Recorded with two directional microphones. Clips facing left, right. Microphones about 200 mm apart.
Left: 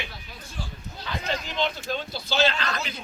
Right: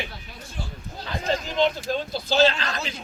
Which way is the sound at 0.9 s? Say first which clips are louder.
Right 4 dB; 40° right (ahead or behind).